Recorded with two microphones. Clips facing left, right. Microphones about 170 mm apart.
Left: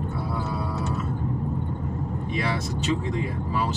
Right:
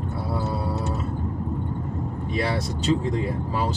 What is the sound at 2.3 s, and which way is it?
Speech, 35° right (ahead or behind).